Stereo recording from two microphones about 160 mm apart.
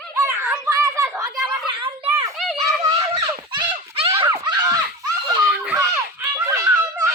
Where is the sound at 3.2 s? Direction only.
30° right (ahead or behind).